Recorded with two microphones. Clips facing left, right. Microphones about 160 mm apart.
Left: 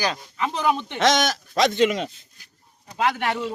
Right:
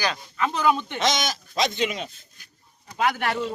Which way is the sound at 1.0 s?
70° left (ahead or behind).